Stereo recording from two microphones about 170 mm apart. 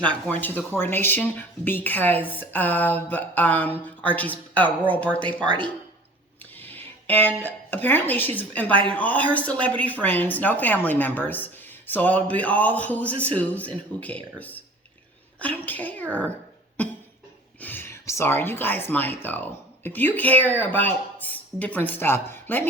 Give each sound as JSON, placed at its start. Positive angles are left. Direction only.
{"t": 0.3, "sound": "a woman's voice", "side_deg": 10}
{"t": 6.6, "sound": "music", "side_deg": 10}
{"t": 7.4, "sound": "a woman's voice", "side_deg": 10}
{"t": 8.7, "sound": "speech", "side_deg": -30}
{"t": 9.0, "sound": "a woman's voice", "side_deg": 10}
{"t": 17.6, "sound": "a woman's voice", "side_deg": 10}